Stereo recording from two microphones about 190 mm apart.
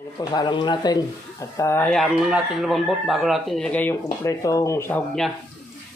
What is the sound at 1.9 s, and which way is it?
A man's voice, centre (ahead or behind).